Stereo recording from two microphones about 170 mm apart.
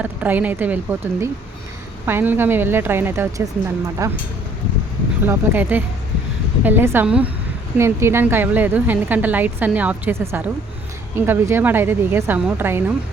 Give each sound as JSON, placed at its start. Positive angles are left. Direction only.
{"t": 0.0, "sound": "a woman's voice", "side_deg": -10}
{"t": 5.2, "sound": "a woman's voice", "side_deg": -10}